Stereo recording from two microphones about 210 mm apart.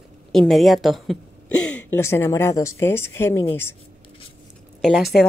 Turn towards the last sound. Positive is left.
turn(degrees=0)  # may be behind; listen again after turning